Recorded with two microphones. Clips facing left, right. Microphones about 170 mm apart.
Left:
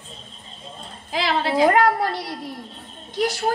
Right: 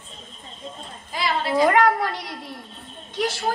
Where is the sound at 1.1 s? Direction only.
90° left.